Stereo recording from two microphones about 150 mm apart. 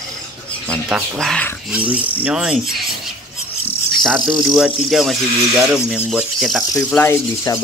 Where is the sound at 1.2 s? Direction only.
5° left (ahead or behind).